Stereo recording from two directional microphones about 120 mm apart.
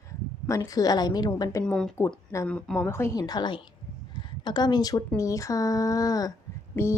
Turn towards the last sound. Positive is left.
turn(degrees=20)  # may be behind; listen again after turning